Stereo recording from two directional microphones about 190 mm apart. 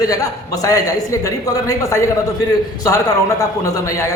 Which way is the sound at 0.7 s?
15° left (ahead or behind).